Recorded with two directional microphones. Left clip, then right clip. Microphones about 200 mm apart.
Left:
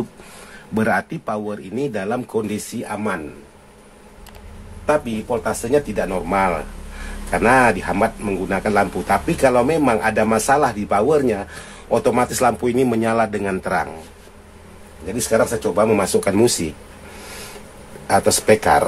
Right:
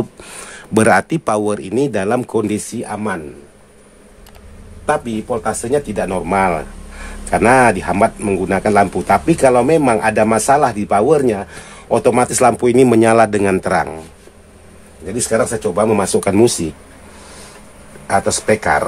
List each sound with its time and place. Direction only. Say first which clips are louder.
0.7 s speech: right 8 dB; 50° right (ahead or behind)
4.8 s speech: right 2 dB; 40° right (ahead or behind)
15.3 s speech: right 1 dB; 35° right (ahead or behind)
18.0 s speech: even; 5° right (ahead or behind)